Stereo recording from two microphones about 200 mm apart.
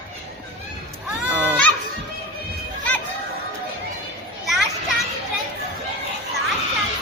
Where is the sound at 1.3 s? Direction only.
5° right (ahead or behind).